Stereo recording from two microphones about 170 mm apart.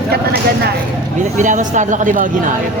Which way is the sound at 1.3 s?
45° right (ahead or behind).